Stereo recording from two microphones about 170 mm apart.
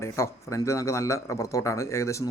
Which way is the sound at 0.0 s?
15° left (ahead or behind).